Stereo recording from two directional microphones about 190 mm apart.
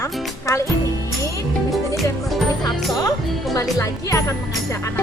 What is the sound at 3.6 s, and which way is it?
Speech, 15° left (ahead or behind).